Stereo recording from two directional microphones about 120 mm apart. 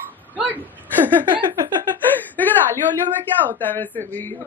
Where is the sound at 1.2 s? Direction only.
40° right (ahead or behind).